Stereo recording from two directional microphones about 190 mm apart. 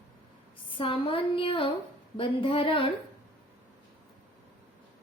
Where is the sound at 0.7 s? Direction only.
30° left (ahead or behind).